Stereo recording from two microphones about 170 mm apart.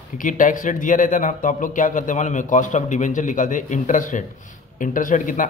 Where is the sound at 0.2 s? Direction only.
50° left (ahead or behind).